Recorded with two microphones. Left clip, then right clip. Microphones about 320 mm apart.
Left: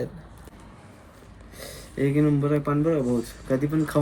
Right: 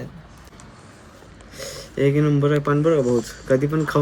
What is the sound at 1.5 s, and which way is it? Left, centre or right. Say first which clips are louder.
Speech: right 6 dB; centre.